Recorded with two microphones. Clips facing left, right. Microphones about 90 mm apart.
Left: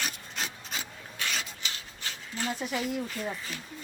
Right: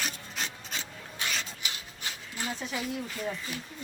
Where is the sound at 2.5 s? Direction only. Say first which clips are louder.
Left 3 dB; 10° left (ahead or behind).